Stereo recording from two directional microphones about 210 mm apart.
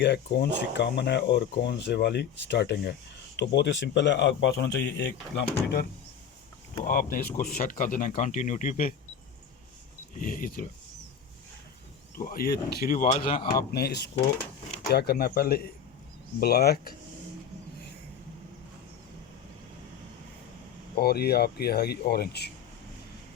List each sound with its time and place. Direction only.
0.0 s speech: 55° left (ahead or behind)
6.8 s speech: 45° left (ahead or behind)
10.2 s speech: 40° left (ahead or behind)
12.1 s speech: 45° left (ahead or behind)
13.7 s speech: 50° left (ahead or behind)
20.9 s speech: 50° left (ahead or behind)